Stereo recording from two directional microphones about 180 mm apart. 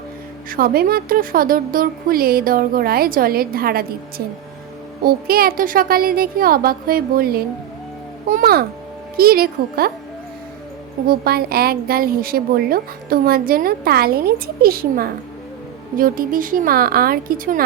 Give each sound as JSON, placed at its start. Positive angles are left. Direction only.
{"t": 0.5, "sound": "a woman's voice", "side_deg": -55}
{"t": 5.0, "sound": "a woman's voice", "side_deg": -55}
{"t": 11.0, "sound": "a woman's voice", "side_deg": -55}